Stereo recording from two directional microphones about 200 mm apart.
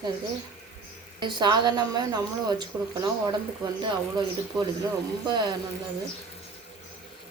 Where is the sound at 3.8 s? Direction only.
20° right (ahead or behind).